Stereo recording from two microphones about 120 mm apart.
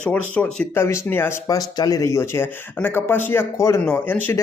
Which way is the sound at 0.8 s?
20° left (ahead or behind).